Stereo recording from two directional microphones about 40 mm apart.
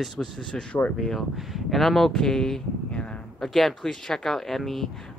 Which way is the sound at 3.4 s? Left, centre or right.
Centre.